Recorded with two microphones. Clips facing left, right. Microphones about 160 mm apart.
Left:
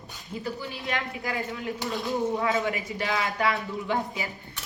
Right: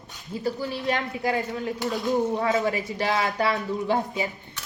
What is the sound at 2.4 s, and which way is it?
A woman's voice, 40° right (ahead or behind).